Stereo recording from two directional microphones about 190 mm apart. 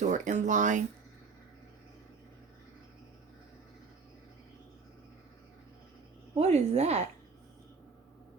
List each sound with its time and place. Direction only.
0.0 s speech: 40° right (ahead or behind)
6.3 s speech: 35° right (ahead or behind)